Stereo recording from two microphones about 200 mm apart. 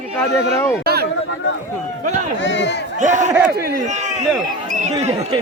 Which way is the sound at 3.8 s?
35° right (ahead or behind).